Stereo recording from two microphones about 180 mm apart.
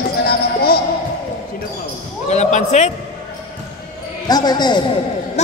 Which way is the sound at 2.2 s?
40° left (ahead or behind).